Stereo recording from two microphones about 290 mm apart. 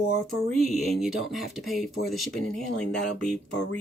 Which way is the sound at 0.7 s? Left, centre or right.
Centre.